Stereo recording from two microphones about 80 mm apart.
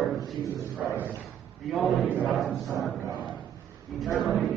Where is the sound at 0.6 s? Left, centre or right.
Right.